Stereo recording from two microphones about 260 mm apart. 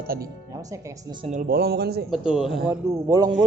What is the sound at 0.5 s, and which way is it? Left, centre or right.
Speech, centre.